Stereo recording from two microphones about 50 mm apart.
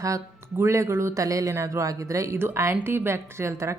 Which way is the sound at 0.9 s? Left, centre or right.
Right.